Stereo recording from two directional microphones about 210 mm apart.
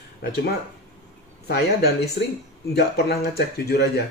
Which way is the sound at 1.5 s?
50° left (ahead or behind).